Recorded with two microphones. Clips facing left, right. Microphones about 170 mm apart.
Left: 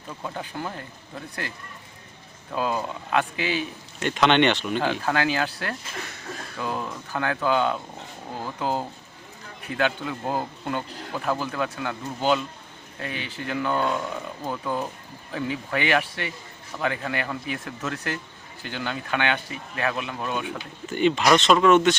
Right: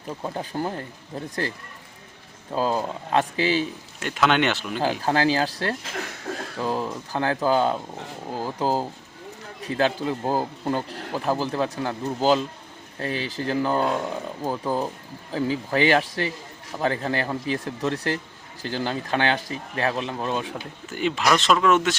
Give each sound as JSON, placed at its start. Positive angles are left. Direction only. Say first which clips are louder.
{"t": 0.1, "sound": "speech", "louder": "right 4 dB", "side_deg": -30}
{"t": 4.0, "sound": "speech", "louder": "left 2 dB", "side_deg": -5}
{"t": 5.0, "sound": "speech", "louder": "right 3 dB", "side_deg": -30}
{"t": 20.8, "sound": "speech", "louder": "left 3 dB", "side_deg": 0}